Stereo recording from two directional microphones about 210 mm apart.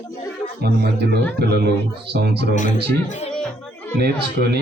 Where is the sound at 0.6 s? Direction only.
50° right (ahead or behind).